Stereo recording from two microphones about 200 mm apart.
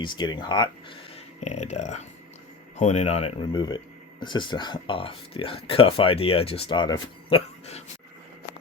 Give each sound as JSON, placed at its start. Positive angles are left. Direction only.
{"t": 0.0, "sound": "speech", "side_deg": 20}